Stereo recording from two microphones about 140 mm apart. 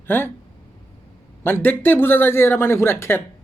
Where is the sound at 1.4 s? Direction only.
15° left (ahead or behind).